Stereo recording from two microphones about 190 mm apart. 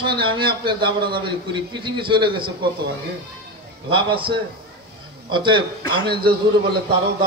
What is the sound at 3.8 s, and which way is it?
A man's voice, 25° right (ahead or behind).